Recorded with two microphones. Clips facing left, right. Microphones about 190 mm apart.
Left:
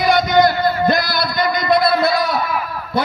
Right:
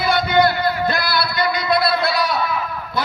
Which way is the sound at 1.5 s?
45° left (ahead or behind).